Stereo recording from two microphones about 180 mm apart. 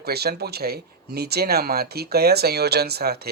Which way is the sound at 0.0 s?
60° right (ahead or behind).